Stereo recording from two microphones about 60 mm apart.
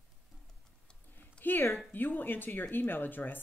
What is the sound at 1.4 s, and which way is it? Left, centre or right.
A woman's voice, left.